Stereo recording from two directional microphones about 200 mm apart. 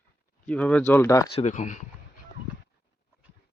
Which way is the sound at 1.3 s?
35° left (ahead or behind).